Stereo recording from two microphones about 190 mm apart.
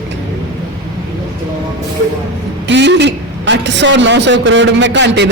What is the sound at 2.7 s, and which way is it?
A man's voice, 65° right (ahead or behind).